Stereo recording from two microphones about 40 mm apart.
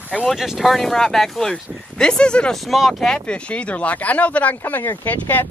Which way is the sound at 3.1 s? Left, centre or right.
Left.